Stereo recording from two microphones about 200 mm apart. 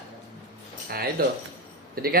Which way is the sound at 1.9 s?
50° right (ahead or behind).